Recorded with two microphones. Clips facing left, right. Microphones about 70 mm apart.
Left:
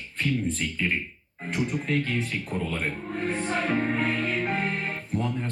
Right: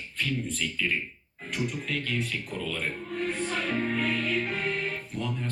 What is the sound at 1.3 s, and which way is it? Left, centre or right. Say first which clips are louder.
Music: left 4 dB; left.